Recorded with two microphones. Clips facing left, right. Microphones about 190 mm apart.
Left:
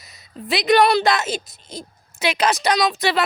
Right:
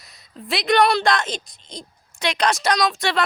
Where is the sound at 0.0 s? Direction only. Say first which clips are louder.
Left 3 dB; centre (ahead or behind).